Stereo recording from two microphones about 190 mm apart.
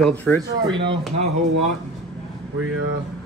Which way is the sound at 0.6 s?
25° right (ahead or behind).